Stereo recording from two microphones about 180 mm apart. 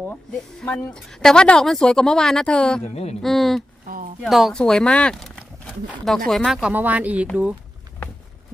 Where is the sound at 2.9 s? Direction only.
35° left (ahead or behind).